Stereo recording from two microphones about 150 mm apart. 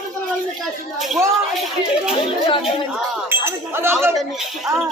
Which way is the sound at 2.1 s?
40° left (ahead or behind).